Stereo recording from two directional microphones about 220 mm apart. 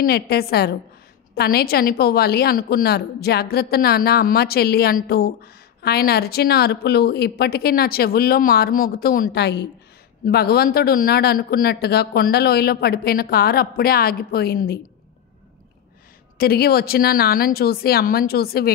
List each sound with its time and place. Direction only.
0.0 s a woman's voice: 45° left (ahead or behind)
16.3 s a woman's voice: 45° left (ahead or behind)